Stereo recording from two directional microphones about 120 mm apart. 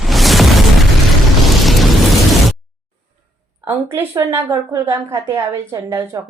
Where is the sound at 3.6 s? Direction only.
20° right (ahead or behind).